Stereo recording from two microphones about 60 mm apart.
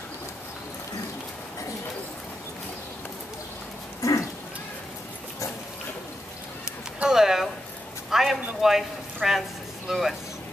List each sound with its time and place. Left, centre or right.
4.0 s dog: left
7.0 s a sound: centre
9.8 s speech: centre